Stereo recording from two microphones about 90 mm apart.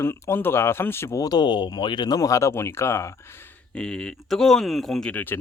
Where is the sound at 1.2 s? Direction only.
50° left (ahead or behind).